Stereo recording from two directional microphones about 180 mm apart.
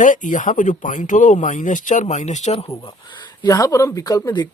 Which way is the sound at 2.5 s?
30° left (ahead or behind).